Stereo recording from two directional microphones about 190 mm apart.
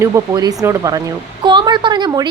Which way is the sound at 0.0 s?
20° right (ahead or behind).